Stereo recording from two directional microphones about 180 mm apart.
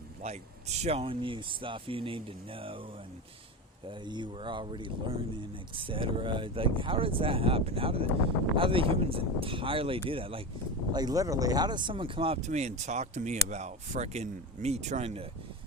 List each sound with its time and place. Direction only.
0.2 s speech: 35° right (ahead or behind)
3.8 s speech: 25° right (ahead or behind)